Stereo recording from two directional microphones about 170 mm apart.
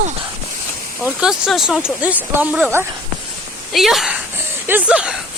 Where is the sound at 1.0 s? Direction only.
5° right (ahead or behind).